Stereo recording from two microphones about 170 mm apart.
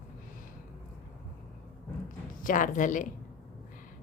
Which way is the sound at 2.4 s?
50° left (ahead or behind).